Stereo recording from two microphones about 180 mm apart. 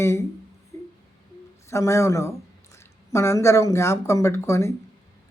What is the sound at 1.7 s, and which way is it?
Speech, 15° left (ahead or behind).